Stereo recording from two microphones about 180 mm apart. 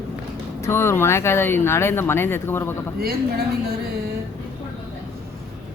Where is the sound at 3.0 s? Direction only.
60° right (ahead or behind).